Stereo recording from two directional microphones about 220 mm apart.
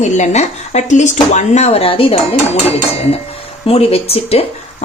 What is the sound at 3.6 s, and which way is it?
Speech, 25° left (ahead or behind).